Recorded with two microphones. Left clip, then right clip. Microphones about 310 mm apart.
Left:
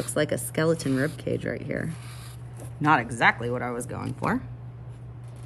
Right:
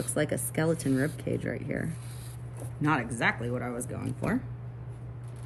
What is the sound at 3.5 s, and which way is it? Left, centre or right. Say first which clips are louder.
Speech: left 5 dB; left.